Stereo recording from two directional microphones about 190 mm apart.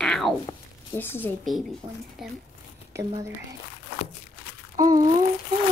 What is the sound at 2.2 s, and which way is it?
Speech, centre (ahead or behind).